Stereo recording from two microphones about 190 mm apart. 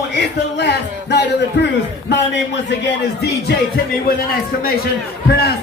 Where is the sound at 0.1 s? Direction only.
65° left (ahead or behind).